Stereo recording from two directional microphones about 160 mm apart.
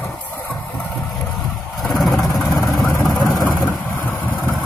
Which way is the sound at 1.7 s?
Centre (ahead or behind).